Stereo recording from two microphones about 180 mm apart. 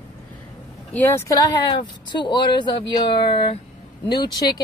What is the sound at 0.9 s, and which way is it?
Speech, 10° left (ahead or behind).